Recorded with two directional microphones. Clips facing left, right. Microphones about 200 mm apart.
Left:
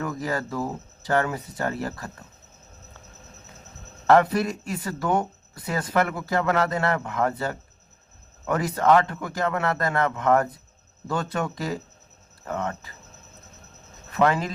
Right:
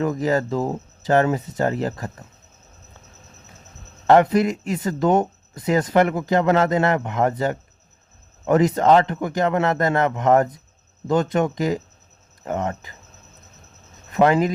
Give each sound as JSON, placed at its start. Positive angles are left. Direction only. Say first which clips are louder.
{"t": 0.0, "sound": "speech", "louder": "right 8 dB", "side_deg": -20}
{"t": 4.0, "sound": "speech", "louder": "right 4 dB", "side_deg": -20}
{"t": 14.1, "sound": "speech", "louder": "right 5 dB", "side_deg": -20}